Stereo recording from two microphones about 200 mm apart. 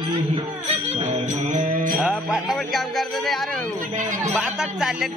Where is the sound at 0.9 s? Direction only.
35° right (ahead or behind).